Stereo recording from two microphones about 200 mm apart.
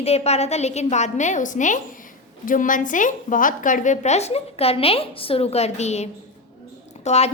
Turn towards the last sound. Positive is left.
turn(degrees=30)  # may be behind; listen again after turning